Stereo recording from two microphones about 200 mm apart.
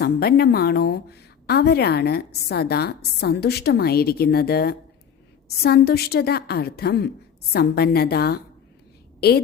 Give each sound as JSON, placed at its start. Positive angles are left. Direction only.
{"t": 0.0, "sound": "a woman's voice", "side_deg": 50}